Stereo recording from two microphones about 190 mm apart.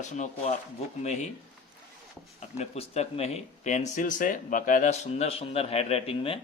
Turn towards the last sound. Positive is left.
turn(degrees=30)  # may be behind; listen again after turning